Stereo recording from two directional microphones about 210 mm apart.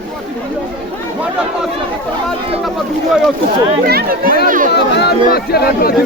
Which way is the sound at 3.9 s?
45° right (ahead or behind).